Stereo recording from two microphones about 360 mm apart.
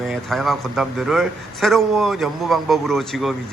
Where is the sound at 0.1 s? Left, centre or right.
Centre.